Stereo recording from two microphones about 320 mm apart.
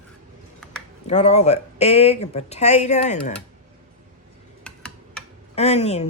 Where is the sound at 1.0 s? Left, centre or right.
Left.